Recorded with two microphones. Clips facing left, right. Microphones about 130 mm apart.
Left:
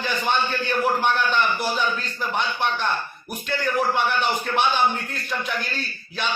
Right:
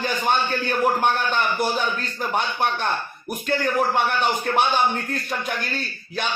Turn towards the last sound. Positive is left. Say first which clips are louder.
# right 1 dB
turn(degrees=-45)  # may be behind; listen again after turning